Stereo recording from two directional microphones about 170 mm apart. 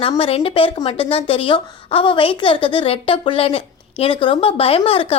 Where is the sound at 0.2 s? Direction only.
35° left (ahead or behind).